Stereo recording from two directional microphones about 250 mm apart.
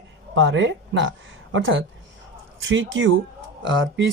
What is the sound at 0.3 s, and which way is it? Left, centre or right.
Speech, right.